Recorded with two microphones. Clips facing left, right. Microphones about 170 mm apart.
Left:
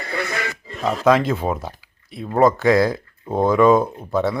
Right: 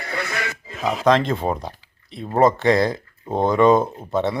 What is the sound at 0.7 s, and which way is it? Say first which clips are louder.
Speech: left 1 dB; centre (ahead or behind).